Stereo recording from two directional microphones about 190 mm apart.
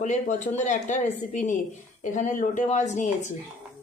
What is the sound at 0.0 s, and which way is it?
A woman's voice, 40° left (ahead or behind).